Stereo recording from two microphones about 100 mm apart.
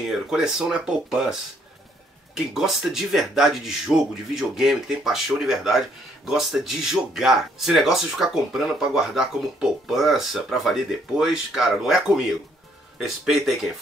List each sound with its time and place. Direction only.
0.3 s speech: 5° right (ahead or behind)